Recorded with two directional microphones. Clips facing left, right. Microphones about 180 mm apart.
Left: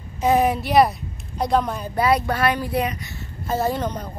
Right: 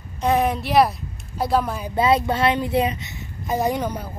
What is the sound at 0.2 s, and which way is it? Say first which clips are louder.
Speech: left 2 dB; centre (ahead or behind).